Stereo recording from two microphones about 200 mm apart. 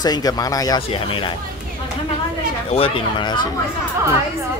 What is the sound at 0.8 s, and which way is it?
Speech, 30° left (ahead or behind).